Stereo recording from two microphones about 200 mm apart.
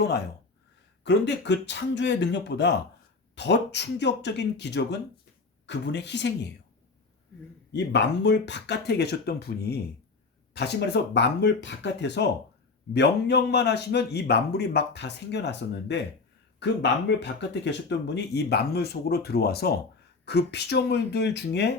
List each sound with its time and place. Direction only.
1.0 s a man's voice: 60° left (ahead or behind)
7.7 s a man's voice: 60° left (ahead or behind)